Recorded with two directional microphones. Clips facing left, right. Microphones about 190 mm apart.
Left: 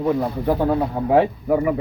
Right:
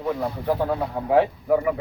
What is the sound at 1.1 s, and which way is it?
Speech, 5° left (ahead or behind).